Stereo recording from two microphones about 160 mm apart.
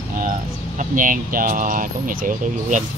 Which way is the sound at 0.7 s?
55° right (ahead or behind).